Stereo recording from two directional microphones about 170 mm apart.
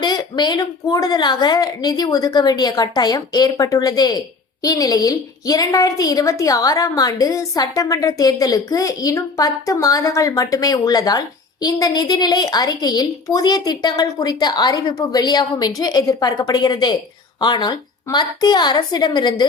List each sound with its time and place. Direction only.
0.0 s a woman's voice: 25° left (ahead or behind)